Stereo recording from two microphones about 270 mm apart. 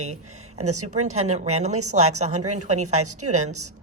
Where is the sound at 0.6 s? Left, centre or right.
Right.